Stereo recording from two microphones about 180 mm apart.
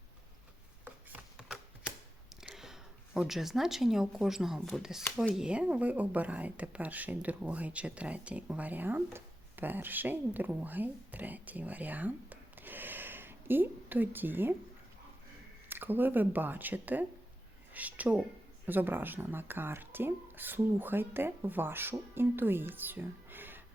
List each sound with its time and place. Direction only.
1.1 s a sound: 5° right (ahead or behind)
2.4 s a woman's voice: 5° right (ahead or behind)
15.7 s a woman's voice: 10° right (ahead or behind)